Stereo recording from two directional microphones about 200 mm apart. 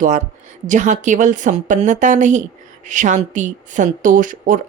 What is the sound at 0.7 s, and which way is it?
Speech, 40° right (ahead or behind).